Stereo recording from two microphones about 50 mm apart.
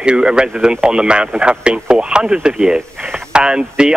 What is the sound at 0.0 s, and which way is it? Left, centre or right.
Speech, centre.